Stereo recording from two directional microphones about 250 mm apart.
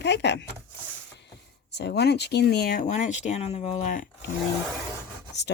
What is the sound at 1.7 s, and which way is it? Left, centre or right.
Speech, left.